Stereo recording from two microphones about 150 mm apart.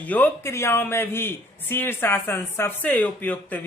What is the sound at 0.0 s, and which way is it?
A man's voice, 10° left (ahead or behind).